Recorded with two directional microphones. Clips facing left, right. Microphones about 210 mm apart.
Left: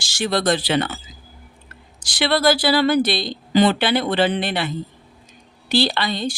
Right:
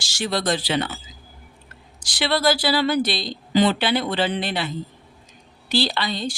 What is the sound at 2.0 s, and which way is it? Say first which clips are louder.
Speech: left 3 dB; 55° left (ahead or behind).